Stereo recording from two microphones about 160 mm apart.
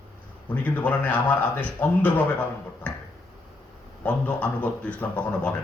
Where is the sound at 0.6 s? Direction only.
10° left (ahead or behind).